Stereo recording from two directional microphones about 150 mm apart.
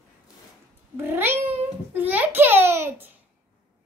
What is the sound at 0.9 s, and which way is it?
A child's voice, 15° right (ahead or behind).